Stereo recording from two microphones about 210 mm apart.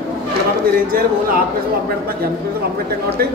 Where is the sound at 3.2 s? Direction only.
50° right (ahead or behind).